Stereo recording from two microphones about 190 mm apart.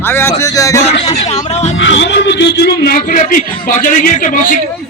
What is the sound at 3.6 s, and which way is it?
Speech, 45° left (ahead or behind).